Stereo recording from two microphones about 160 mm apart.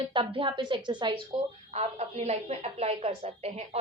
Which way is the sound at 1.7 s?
45° right (ahead or behind).